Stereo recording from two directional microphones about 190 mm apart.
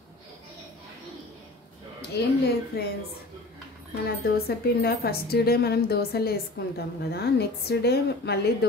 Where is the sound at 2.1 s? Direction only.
60° left (ahead or behind).